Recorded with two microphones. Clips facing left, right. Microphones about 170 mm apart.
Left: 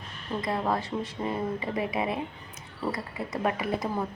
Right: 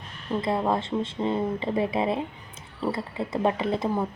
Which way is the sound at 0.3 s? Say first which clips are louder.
Right 4 dB; 20° right (ahead or behind).